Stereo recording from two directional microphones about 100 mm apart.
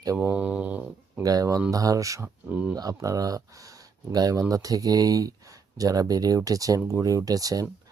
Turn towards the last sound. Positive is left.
turn(degrees=-35)  # may be behind; listen again after turning